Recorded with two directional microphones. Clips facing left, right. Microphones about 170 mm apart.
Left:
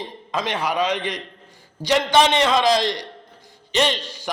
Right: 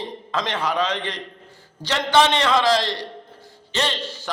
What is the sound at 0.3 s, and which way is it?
A man's voice, 15° left (ahead or behind).